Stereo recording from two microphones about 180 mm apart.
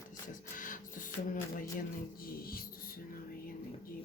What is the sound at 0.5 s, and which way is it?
Printer, 45° left (ahead or behind).